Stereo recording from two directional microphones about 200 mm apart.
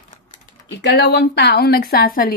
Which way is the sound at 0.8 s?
55° left (ahead or behind).